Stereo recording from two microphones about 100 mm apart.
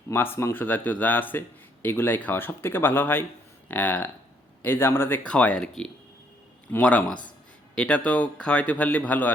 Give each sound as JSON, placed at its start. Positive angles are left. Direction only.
{"t": 0.1, "sound": "speech", "side_deg": 25}